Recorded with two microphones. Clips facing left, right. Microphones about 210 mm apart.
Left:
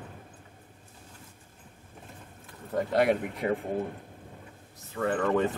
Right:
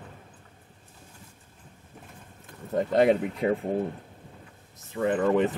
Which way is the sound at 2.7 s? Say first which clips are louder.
Right 3 dB; 25° right (ahead or behind).